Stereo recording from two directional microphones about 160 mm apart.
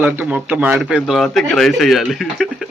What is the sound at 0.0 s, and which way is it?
A man's voice, 10° right (ahead or behind).